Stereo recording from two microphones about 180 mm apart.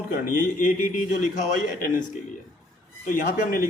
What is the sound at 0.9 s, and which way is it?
A man's voice, 45° left (ahead or behind).